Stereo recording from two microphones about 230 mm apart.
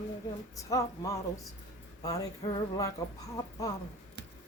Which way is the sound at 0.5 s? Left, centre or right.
Centre.